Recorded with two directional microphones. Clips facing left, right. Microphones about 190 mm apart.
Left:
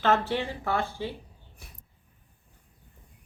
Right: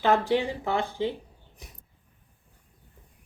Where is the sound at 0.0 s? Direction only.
15° right (ahead or behind).